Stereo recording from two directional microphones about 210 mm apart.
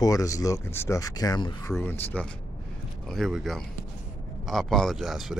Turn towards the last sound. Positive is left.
turn(degrees=0)  # may be behind; listen again after turning